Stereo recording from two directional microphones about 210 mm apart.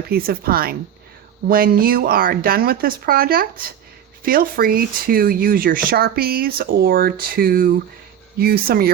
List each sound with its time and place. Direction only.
0.1 s speech: 45° right (ahead or behind)